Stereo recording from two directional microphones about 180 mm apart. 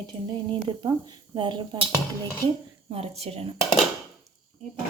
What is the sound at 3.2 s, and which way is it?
Dishes, 35° right (ahead or behind).